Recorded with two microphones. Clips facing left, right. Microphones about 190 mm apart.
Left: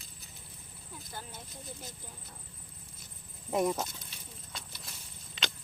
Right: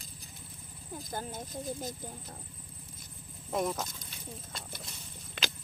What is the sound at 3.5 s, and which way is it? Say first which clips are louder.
Speech: left 2 dB; 5° left (ahead or behind).